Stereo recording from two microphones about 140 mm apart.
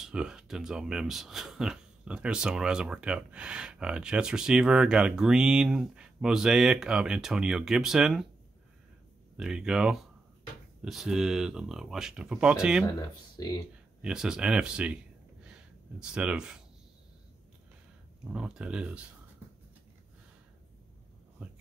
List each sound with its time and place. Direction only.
0.0 s speech: 5° right (ahead or behind)
9.4 s speech: 5° right (ahead or behind)
13.4 s speech: 25° left (ahead or behind)
14.0 s speech: 5° right (ahead or behind)
15.4 s a sound: 5° right (ahead or behind)
18.3 s speech: 5° right (ahead or behind)